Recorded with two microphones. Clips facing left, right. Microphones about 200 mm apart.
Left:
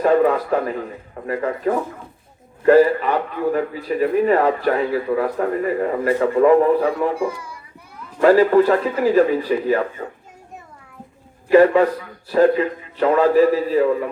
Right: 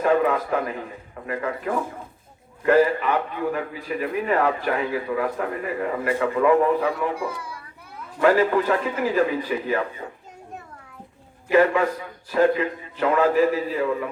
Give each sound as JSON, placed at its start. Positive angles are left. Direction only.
{"t": 0.0, "sound": "a sound", "side_deg": 35}
{"t": 1.3, "sound": "a man's voice", "side_deg": 35}
{"t": 11.5, "sound": "a man's voice", "side_deg": 35}